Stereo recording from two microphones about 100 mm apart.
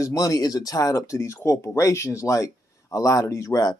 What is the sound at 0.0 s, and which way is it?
Speech, 35° left (ahead or behind).